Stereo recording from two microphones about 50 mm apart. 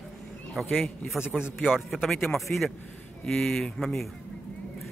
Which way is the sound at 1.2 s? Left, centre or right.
Centre.